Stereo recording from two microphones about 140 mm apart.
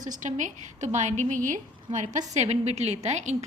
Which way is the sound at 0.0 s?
65° right (ahead or behind).